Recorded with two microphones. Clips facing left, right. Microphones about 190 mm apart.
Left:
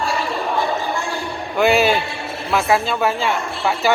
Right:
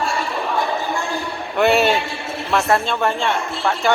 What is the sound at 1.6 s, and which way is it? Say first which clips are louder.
Speech: even; centre (ahead or behind).